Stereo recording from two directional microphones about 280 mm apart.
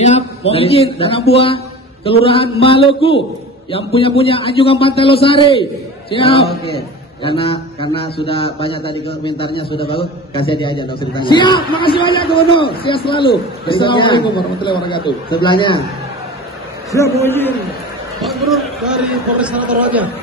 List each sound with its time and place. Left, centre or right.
0.0 s a man's voice: left
16.9 s a man's voice: centre